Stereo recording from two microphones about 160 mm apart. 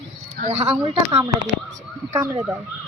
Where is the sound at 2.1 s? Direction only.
15° right (ahead or behind).